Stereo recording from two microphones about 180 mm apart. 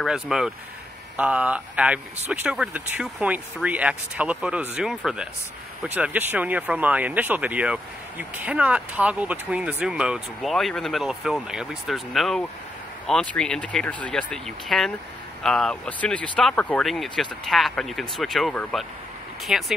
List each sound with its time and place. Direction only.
0.0 s speech: centre (ahead or behind)